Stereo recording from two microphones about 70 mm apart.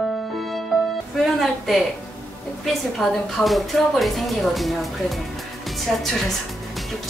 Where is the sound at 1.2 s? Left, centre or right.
Centre.